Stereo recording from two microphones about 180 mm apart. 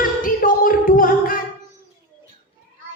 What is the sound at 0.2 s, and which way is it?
Music, 50° left (ahead or behind).